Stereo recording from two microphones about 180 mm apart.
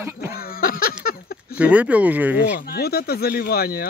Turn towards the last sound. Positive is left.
turn(degrees=60)  # may be behind; listen again after turning